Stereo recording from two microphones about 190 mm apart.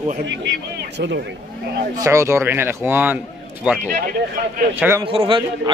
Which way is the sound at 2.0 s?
15° right (ahead or behind).